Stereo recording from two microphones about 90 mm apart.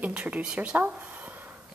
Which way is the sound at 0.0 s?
15° right (ahead or behind).